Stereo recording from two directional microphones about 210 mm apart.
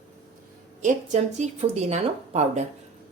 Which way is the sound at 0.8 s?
35° right (ahead or behind).